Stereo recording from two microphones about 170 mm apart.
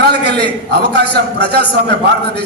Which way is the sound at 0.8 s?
75° right (ahead or behind).